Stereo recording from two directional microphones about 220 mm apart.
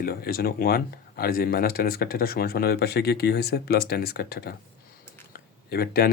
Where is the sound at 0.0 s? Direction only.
45° left (ahead or behind).